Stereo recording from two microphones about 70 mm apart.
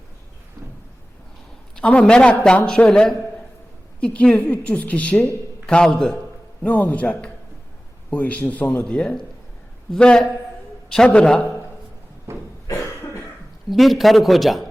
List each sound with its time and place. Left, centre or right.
1.7 s speech: centre
6.7 s speech: left
12.3 s a sound: right
12.7 s cough: left
13.7 s speech: centre